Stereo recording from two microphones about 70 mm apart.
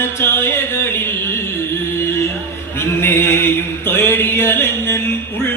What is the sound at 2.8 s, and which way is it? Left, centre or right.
Mantra, left.